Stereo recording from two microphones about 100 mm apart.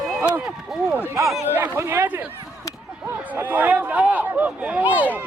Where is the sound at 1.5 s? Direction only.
20° right (ahead or behind).